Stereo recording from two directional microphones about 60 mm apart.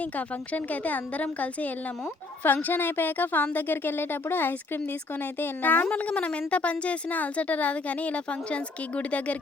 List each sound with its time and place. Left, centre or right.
0.0 s a woman's voice: left